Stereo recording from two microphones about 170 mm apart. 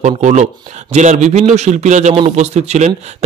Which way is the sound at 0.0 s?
45° right (ahead or behind).